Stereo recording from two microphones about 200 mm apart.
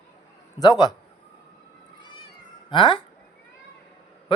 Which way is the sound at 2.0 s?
25° left (ahead or behind).